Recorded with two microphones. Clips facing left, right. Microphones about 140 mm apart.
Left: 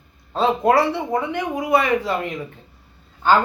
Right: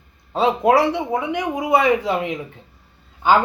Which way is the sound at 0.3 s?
10° right (ahead or behind).